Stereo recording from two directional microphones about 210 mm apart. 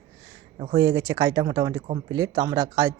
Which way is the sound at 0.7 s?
20° right (ahead or behind).